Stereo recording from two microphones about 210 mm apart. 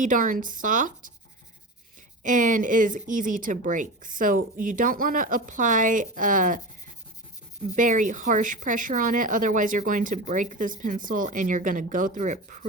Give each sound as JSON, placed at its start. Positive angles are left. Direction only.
{"t": 0.0, "sound": "speech", "side_deg": -40}
{"t": 2.2, "sound": "speech", "side_deg": -40}
{"t": 7.8, "sound": "speech", "side_deg": -40}